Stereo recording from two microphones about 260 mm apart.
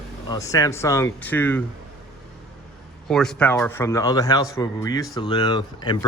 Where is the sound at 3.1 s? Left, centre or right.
Centre.